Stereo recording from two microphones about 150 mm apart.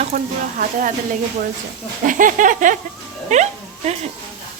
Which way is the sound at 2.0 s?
60° right (ahead or behind).